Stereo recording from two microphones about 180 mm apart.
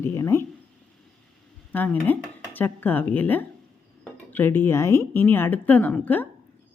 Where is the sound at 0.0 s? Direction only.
15° left (ahead or behind).